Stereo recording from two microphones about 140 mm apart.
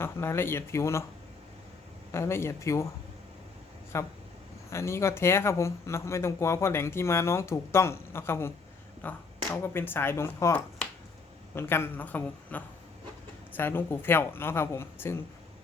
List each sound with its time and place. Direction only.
0.0 s a woman's voice: 15° left (ahead or behind)
2.1 s speech: 20° left (ahead or behind)
3.9 s a woman's voice: 20° left (ahead or behind)